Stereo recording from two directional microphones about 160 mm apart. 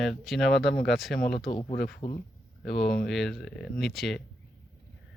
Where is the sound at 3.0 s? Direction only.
Centre (ahead or behind).